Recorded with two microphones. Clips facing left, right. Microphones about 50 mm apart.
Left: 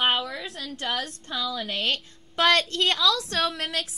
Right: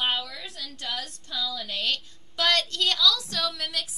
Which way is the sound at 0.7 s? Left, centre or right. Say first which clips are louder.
Left 5 dB; left.